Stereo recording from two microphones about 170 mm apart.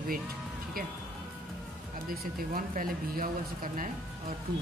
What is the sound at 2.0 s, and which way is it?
Speech, 55° right (ahead or behind).